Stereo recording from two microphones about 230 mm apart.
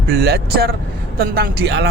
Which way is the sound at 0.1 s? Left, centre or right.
Right.